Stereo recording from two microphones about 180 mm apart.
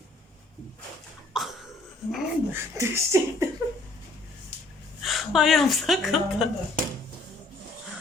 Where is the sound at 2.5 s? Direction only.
15° right (ahead or behind).